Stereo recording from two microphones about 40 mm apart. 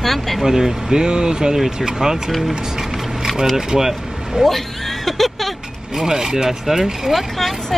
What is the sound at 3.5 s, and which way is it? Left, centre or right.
Speech, centre.